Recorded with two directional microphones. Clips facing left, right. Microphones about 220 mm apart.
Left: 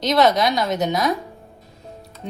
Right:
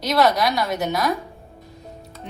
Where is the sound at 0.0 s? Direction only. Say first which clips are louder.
Left 2 dB; 20° left (ahead or behind).